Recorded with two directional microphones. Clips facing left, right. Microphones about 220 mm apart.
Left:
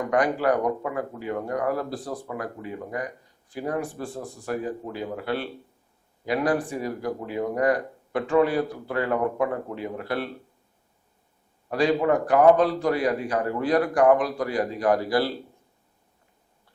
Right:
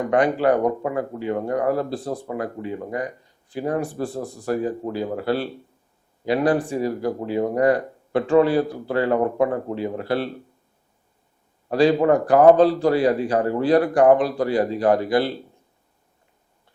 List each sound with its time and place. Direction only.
0.1 s speech: 25° right (ahead or behind)
11.7 s speech: 30° right (ahead or behind)